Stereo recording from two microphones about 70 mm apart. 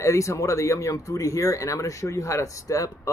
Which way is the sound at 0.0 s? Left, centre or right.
Left.